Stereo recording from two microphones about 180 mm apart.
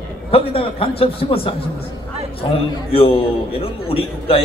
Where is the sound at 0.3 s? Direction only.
30° left (ahead or behind).